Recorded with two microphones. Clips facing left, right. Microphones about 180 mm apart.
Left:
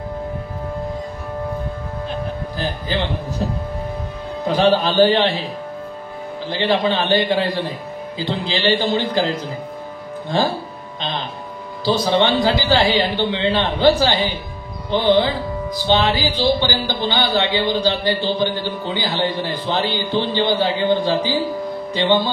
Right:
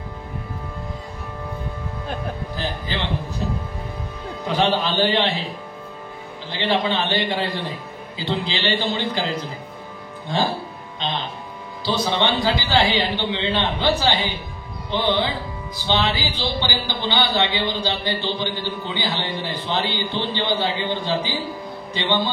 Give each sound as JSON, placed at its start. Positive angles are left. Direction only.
{"t": 2.5, "sound": "a man's voice", "side_deg": 40}
{"t": 4.5, "sound": "a man's voice", "side_deg": 40}
{"t": 6.5, "sound": "a man's voice", "side_deg": 40}
{"t": 11.8, "sound": "a man's voice", "side_deg": 40}